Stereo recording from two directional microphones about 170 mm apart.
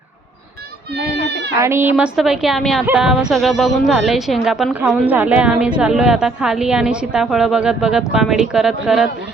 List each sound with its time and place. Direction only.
0.9 s speech: 80° right
1.6 s a woman's voice: 15° right (ahead or behind)